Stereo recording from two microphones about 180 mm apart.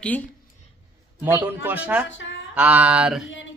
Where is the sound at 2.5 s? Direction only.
10° right (ahead or behind).